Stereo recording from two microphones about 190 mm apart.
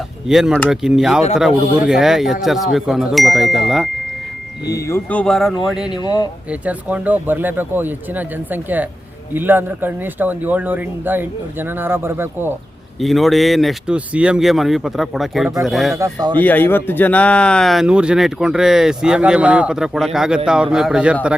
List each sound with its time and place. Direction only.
0.3 s speech: 5° right (ahead or behind)
4.6 s speech: 15° left (ahead or behind); by 6.0 s 5° right (ahead or behind)
6.0 s speech: 20° left (ahead or behind)
6.5 s speech: 5° right (ahead or behind)
13.0 s speech: centre (ahead or behind)
16.0 s speech: 20° right (ahead or behind)
16.4 s speech: 10° left (ahead or behind)